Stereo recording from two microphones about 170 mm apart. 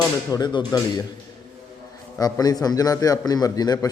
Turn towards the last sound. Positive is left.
turn(degrees=20)  # may be behind; listen again after turning